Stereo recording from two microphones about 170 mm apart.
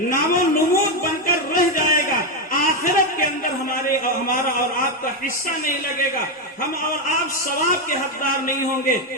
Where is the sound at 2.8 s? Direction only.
55° left (ahead or behind).